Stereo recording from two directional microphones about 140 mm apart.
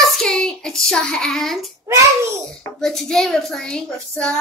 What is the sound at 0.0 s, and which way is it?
Child singing, 5° left (ahead or behind).